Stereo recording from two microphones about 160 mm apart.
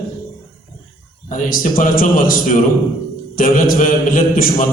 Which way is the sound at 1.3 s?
60° left (ahead or behind).